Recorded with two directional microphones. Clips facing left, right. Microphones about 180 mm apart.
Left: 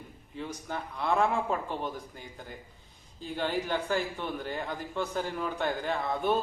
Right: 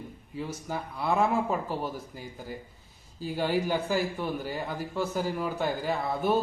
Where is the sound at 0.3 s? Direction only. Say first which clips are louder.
Right 2 dB; 5° right (ahead or behind).